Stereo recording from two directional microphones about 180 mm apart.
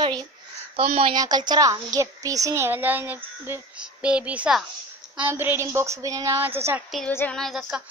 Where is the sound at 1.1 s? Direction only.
20° right (ahead or behind).